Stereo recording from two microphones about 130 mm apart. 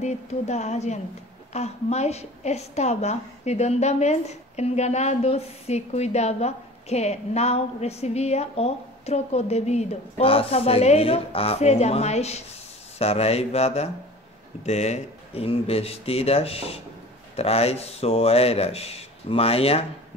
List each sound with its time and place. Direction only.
0.0 s a woman's voice: 60° left (ahead or behind)